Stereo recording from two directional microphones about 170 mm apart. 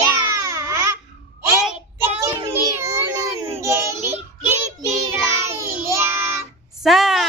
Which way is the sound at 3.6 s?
15° right (ahead or behind).